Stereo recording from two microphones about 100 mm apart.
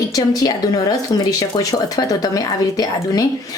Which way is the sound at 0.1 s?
40° left (ahead or behind).